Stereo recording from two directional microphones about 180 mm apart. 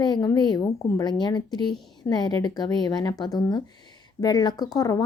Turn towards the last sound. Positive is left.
turn(degrees=20)  # may be behind; listen again after turning